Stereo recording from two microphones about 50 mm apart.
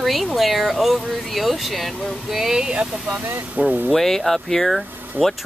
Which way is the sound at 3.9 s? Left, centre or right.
Centre.